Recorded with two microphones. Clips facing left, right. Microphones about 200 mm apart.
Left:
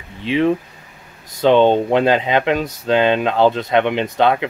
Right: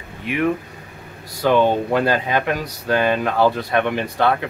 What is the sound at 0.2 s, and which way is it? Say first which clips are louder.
Speech: left 4 dB; 25° left (ahead or behind).